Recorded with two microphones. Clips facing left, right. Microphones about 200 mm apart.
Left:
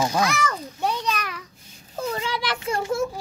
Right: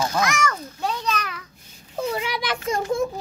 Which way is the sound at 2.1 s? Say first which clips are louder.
Right 1 dB; 15° right (ahead or behind).